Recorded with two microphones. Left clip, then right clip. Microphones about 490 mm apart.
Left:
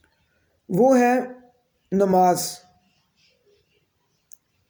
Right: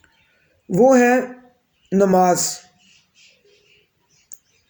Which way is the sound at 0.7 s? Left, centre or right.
Left.